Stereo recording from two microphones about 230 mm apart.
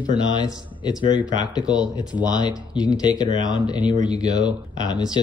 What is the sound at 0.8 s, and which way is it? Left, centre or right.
Speech, centre.